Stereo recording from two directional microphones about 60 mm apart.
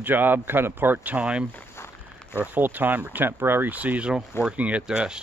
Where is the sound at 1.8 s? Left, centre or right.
Left.